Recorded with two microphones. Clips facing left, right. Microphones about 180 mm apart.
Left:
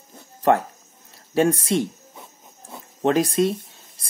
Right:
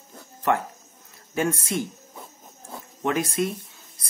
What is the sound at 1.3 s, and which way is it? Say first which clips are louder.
Speech: left 6 dB; 35° left (ahead or behind).